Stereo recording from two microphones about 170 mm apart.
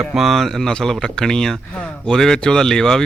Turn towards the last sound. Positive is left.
turn(degrees=5)  # may be behind; listen again after turning